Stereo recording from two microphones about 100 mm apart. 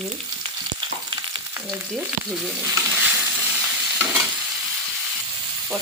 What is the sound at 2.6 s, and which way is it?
Stir, 20° right (ahead or behind).